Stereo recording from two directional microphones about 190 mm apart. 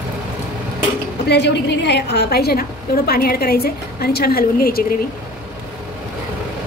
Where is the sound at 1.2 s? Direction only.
65° left (ahead or behind).